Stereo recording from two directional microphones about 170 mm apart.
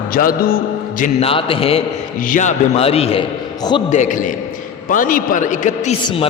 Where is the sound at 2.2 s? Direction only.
50° left (ahead or behind).